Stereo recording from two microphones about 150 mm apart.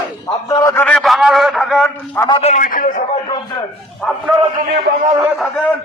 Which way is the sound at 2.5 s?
70° left (ahead or behind).